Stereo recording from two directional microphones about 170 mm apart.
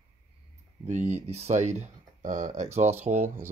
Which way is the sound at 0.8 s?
45° right (ahead or behind).